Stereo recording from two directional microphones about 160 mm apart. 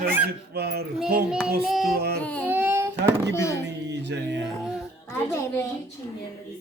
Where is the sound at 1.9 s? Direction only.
85° right.